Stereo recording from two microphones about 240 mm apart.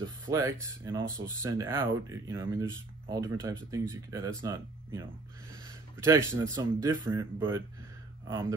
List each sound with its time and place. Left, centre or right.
0.0 s speech: centre